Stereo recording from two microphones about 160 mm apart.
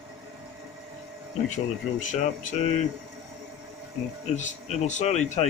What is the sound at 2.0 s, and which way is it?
Speech, 50° left (ahead or behind).